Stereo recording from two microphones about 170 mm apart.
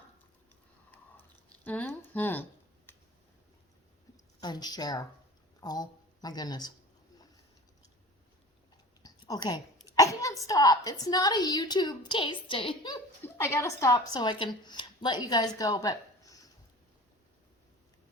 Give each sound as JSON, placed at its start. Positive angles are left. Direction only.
{"t": 1.6, "sound": "speech", "side_deg": 10}
{"t": 4.4, "sound": "a woman's voice", "side_deg": 25}
{"t": 9.0, "sound": "a sound", "side_deg": 25}
{"t": 9.8, "sound": "a woman's voice", "side_deg": 20}
{"t": 13.2, "sound": "speech", "side_deg": 15}